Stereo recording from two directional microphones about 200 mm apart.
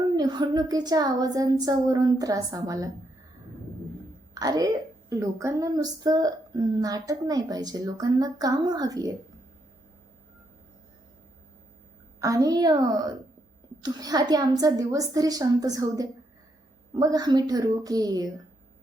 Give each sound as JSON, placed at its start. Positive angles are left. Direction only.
{"t": 0.2, "sound": "speech", "side_deg": -20}
{"t": 4.4, "sound": "a woman's voice", "side_deg": -20}
{"t": 12.2, "sound": "a woman's voice", "side_deg": -20}